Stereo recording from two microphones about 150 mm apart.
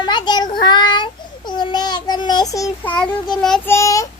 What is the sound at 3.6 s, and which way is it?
Child singing, 20° left (ahead or behind).